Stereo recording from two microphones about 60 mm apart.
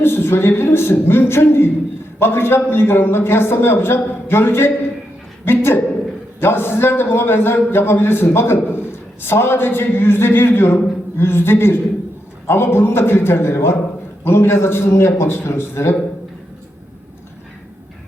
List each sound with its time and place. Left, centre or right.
0.0 s a man's voice: left